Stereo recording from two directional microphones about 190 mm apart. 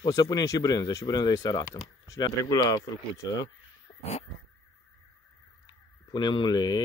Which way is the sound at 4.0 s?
35° left (ahead or behind).